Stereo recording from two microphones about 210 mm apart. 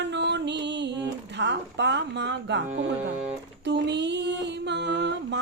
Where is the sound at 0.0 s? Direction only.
55° right (ahead or behind).